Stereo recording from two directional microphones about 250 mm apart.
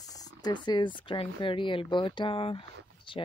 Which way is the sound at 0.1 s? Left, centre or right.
Centre.